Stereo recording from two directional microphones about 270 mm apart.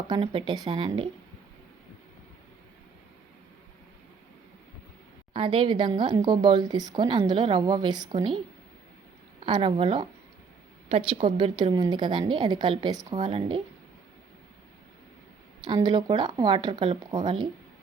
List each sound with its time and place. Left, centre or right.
0.1 s speech: centre
5.3 s speech: centre
9.4 s speech: centre
15.6 s speech: centre